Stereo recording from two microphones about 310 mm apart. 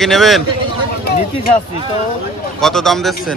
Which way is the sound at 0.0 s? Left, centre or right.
Centre.